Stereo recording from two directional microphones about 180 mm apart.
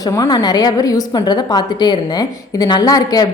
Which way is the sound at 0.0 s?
20° left (ahead or behind).